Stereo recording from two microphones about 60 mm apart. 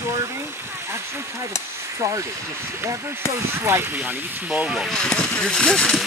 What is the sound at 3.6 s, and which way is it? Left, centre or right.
Speech, right.